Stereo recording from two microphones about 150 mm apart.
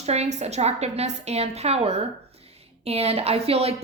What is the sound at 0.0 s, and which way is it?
A woman's voice, 45° right (ahead or behind).